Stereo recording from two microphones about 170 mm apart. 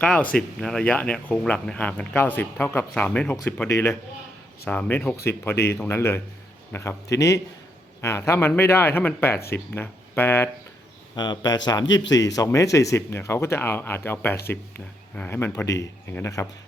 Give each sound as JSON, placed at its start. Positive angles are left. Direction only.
{"t": 0.0, "sound": "speech", "side_deg": 10}
{"t": 11.1, "sound": "speech", "side_deg": 25}